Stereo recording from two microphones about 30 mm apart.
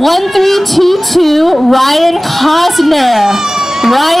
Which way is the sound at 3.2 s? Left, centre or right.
Centre.